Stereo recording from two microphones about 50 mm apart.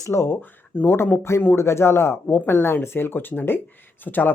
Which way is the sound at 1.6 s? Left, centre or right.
Left.